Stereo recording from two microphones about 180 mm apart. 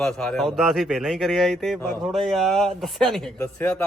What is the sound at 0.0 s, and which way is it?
A man's voice, 5° left (ahead or behind).